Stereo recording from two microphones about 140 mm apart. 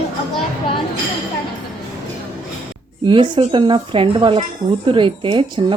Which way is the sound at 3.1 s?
35° right (ahead or behind).